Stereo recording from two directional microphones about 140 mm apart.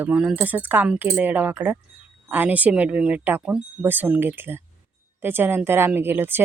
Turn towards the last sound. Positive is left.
turn(degrees=-15)  # may be behind; listen again after turning